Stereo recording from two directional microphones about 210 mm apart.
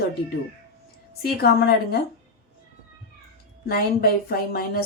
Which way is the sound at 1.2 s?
45° left (ahead or behind).